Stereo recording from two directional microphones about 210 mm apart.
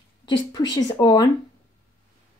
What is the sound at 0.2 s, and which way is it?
A woman's voice, 20° left (ahead or behind).